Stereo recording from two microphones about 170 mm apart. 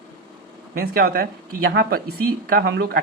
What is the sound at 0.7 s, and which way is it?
Speech, 65° right (ahead or behind).